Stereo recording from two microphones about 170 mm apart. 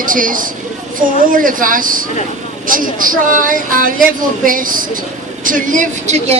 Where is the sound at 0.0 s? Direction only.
55° right (ahead or behind).